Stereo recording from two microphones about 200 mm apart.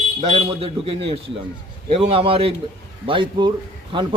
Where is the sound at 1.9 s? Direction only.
30° right (ahead or behind).